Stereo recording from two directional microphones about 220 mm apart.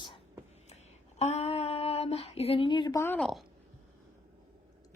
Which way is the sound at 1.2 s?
30° left (ahead or behind).